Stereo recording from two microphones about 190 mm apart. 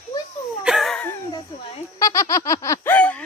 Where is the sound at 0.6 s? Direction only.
Centre (ahead or behind).